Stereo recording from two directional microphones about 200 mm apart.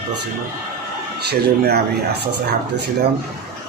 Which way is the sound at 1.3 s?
55° right (ahead or behind).